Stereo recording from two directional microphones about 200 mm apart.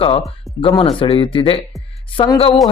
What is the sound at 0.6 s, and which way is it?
Speech, 25° left (ahead or behind).